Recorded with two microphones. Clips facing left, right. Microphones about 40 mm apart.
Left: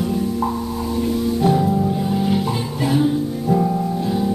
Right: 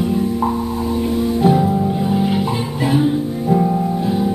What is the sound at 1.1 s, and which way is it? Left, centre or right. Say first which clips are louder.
Music: right 3 dB; centre.